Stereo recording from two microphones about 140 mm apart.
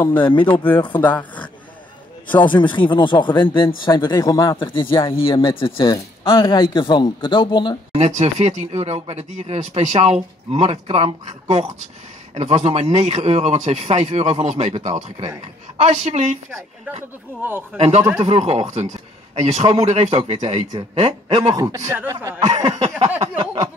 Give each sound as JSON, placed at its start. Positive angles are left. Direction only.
{"t": 0.2, "sound": "speech", "side_deg": 35}
{"t": 0.9, "sound": "speech", "side_deg": 10}
{"t": 2.4, "sound": "speech", "side_deg": 35}
{"t": 4.6, "sound": "speech", "side_deg": 40}
{"t": 7.9, "sound": "a man's voice", "side_deg": -50}
{"t": 17.4, "sound": "speech", "side_deg": -15}
{"t": 17.7, "sound": "a man's voice", "side_deg": -50}
{"t": 21.5, "sound": "speech", "side_deg": -25}
{"t": 22.4, "sound": "a sound", "side_deg": -50}